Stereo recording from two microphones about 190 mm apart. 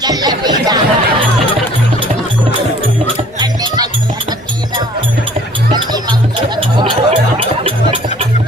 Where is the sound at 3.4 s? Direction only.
20° right (ahead or behind).